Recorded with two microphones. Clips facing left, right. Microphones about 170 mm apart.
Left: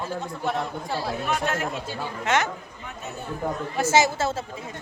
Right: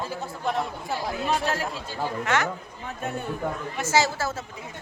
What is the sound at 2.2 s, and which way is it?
Speech, 20° left (ahead or behind).